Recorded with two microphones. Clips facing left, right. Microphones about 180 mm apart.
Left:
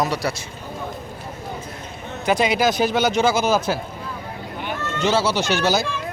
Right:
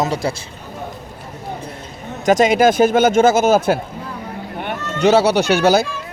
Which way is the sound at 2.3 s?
45° right (ahead or behind).